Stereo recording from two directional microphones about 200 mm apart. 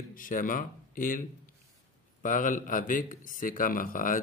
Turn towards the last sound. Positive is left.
turn(degrees=45)  # may be behind; listen again after turning